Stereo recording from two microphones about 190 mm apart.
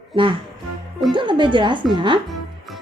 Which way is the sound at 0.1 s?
25° right (ahead or behind).